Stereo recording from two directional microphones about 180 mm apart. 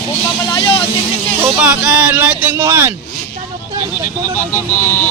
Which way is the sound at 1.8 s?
10° right (ahead or behind).